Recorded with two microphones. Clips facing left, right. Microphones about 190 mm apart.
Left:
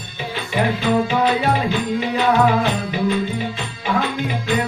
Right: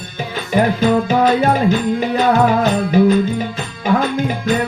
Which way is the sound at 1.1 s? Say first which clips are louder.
Right 4 dB; 40° right (ahead or behind).